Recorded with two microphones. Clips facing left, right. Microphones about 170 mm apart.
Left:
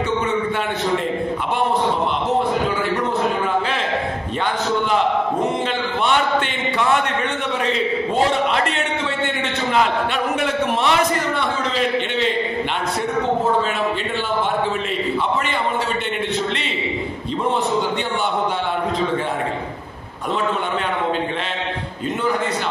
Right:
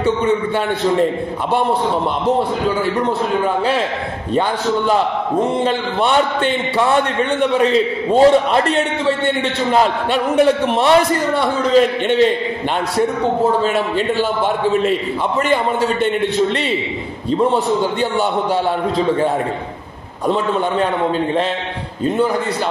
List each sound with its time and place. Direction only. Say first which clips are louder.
5.6 s a man's voice: right 5 dB; 35° right (ahead or behind)